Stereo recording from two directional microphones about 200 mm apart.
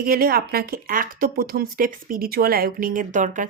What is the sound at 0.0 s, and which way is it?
A woman's voice, 50° right (ahead or behind).